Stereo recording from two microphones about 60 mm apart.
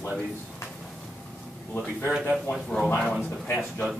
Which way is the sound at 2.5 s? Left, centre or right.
Centre.